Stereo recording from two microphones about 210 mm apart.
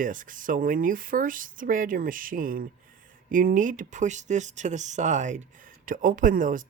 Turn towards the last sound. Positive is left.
turn(degrees=-40)  # may be behind; listen again after turning